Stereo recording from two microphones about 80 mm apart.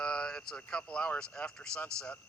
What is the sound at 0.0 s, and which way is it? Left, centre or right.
Speech, centre.